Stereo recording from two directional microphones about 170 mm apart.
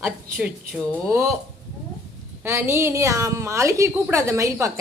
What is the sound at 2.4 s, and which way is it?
A woman's voice, 15° right (ahead or behind).